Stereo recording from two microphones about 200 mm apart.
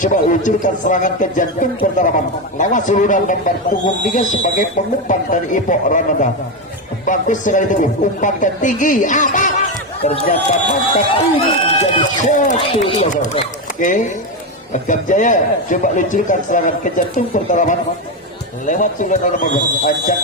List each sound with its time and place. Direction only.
0.0 s speech: 40° left (ahead or behind)